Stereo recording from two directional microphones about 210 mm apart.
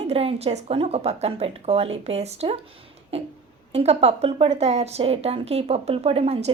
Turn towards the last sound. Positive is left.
turn(degrees=-30)  # may be behind; listen again after turning